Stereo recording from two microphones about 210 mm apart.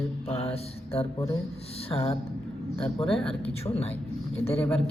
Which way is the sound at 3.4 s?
25° left (ahead or behind).